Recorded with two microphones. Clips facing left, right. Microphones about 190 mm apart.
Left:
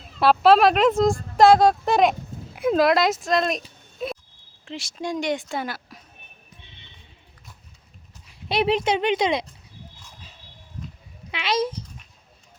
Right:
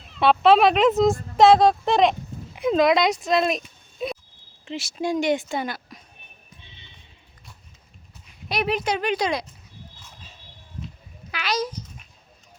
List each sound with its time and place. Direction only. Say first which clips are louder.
0.2 s speech: even; centre (ahead or behind)
4.6 s speech: right 3 dB; 5° right (ahead or behind)
8.4 s speech: left 3 dB; 25° left (ahead or behind)
11.3 s a child's voice: left 3 dB; 25° left (ahead or behind)